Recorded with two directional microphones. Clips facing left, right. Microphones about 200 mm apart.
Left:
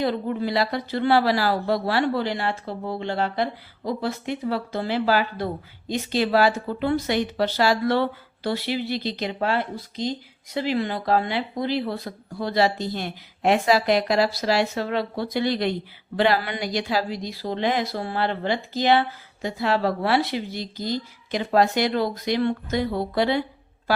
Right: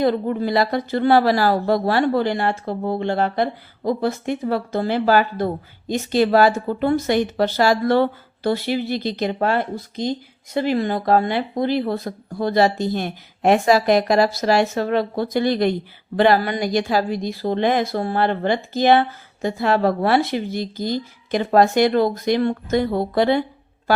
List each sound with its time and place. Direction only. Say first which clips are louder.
0.0 s a woman's voice: right 5 dB; 45° right (ahead or behind)